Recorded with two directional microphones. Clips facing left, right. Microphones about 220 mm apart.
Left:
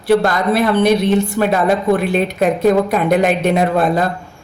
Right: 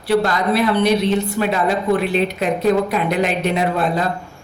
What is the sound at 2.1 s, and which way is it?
A man's voice, 50° left (ahead or behind).